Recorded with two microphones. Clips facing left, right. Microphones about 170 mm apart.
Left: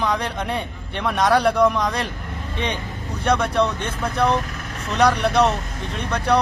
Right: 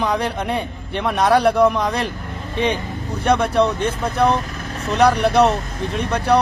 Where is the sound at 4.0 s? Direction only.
30° right (ahead or behind).